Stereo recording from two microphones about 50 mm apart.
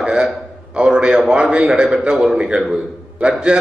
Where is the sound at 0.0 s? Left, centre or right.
Centre.